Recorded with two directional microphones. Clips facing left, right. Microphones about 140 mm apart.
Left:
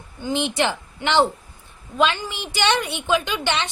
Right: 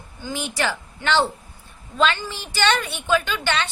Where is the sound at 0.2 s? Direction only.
20° left (ahead or behind).